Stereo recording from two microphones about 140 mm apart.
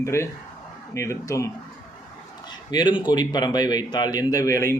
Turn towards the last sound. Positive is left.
turn(degrees=20)  # may be behind; listen again after turning